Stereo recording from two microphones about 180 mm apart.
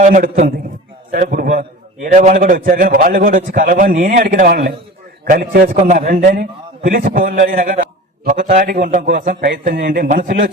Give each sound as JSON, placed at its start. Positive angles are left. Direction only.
{"t": 0.0, "sound": "a man's voice", "side_deg": -45}